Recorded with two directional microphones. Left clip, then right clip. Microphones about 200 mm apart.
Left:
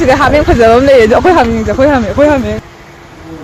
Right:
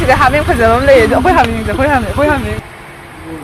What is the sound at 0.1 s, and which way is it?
Speech, 55° left (ahead or behind).